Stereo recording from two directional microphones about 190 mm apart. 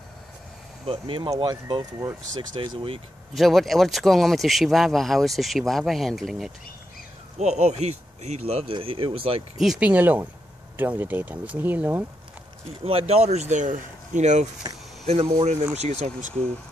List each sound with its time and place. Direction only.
0.8 s speech: 30° right (ahead or behind)
3.3 s speech: centre (ahead or behind)
7.3 s speech: 35° right (ahead or behind)
9.6 s speech: 5° right (ahead or behind)
12.8 s speech: 30° right (ahead or behind)